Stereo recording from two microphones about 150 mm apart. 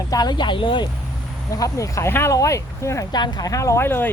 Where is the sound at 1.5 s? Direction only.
20° left (ahead or behind).